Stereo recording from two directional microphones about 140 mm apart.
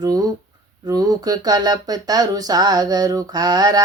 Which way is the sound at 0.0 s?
25° right (ahead or behind).